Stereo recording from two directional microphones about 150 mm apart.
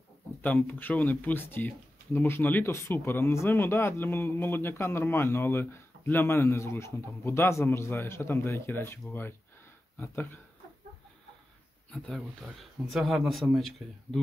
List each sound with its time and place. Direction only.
0.4 s speech: 10° left (ahead or behind)
11.9 s speech: 5° left (ahead or behind)